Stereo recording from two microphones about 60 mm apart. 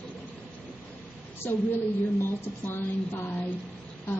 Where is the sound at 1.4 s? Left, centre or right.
Left.